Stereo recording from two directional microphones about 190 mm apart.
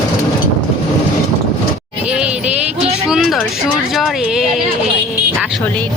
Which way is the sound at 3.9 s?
Centre (ahead or behind).